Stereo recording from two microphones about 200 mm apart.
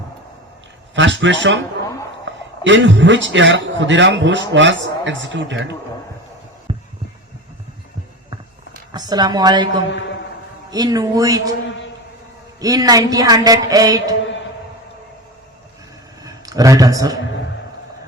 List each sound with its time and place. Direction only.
0.9 s a man's voice: 65° right (ahead or behind)
2.6 s a man's voice: 65° right (ahead or behind)
6.7 s heart sounds: 30° right (ahead or behind)
8.9 s a woman's voice: 20° right (ahead or behind)
10.7 s a woman's voice: 20° right (ahead or behind)
12.5 s a woman's voice: 20° right (ahead or behind)
16.2 s a man's voice: 20° right (ahead or behind)